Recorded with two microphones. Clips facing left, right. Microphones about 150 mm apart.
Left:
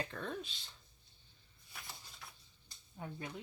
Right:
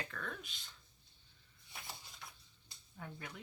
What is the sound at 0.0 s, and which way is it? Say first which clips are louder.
Speech: left 5 dB; 30° left (ahead or behind).